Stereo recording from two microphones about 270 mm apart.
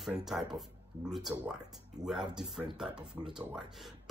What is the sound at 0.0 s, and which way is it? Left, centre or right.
Speech, centre.